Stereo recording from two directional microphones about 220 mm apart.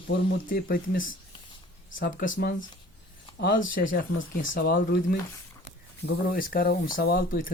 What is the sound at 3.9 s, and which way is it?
Speech, 40° left (ahead or behind).